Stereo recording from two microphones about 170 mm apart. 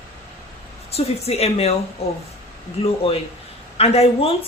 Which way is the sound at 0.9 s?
40° left (ahead or behind).